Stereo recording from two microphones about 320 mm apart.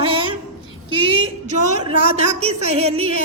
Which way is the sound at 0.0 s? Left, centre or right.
Centre.